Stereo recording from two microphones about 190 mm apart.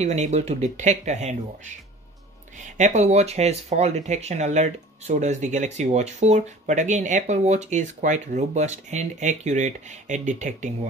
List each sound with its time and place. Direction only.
0.0 s speech: 35° right (ahead or behind)
2.6 s speech: 40° right (ahead or behind)